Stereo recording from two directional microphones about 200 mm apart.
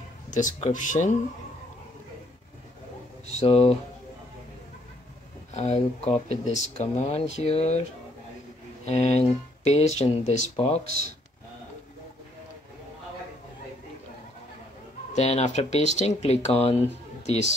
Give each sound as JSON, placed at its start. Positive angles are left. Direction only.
{"t": 0.3, "sound": "speech", "side_deg": 40}
{"t": 3.3, "sound": "speech", "side_deg": 30}
{"t": 5.5, "sound": "speech", "side_deg": 35}
{"t": 8.8, "sound": "speech", "side_deg": 35}
{"t": 15.1, "sound": "speech", "side_deg": 35}